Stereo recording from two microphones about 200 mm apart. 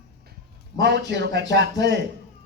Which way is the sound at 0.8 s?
60° right (ahead or behind).